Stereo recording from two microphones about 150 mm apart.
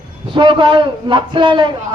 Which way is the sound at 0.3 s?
35° right (ahead or behind).